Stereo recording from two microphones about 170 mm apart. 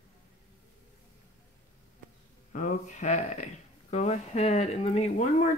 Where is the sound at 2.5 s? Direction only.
45° left (ahead or behind).